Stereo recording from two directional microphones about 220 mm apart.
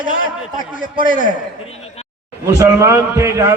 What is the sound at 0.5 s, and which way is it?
Speech, 35° left (ahead or behind).